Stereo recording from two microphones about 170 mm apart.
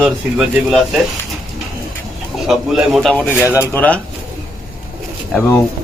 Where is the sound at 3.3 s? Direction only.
10° right (ahead or behind).